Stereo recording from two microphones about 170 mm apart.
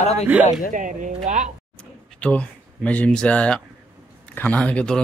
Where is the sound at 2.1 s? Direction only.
5° left (ahead or behind).